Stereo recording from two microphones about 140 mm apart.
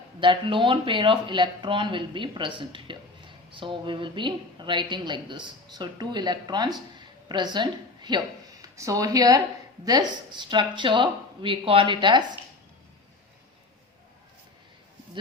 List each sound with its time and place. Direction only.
0.2 s a woman's voice: 35° right (ahead or behind)